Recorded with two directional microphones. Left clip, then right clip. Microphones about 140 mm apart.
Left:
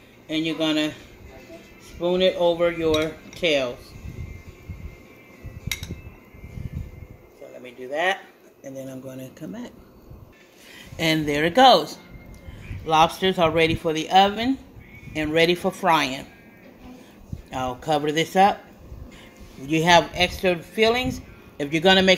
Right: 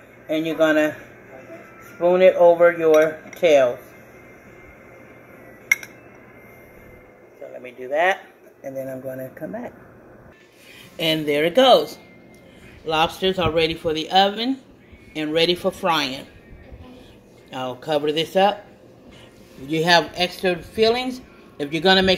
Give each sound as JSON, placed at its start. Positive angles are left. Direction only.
{"t": 0.3, "sound": "speech", "side_deg": 40}
{"t": 2.0, "sound": "speech", "side_deg": 50}
{"t": 7.6, "sound": "a sound", "side_deg": 50}
{"t": 8.6, "sound": "speech", "side_deg": 45}
{"t": 11.0, "sound": "speech", "side_deg": 50}
{"t": 17.5, "sound": "speech", "side_deg": 40}
{"t": 19.7, "sound": "speech", "side_deg": 35}